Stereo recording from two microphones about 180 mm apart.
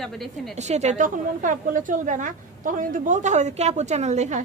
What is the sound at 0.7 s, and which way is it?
A woman's voice, 40° right (ahead or behind).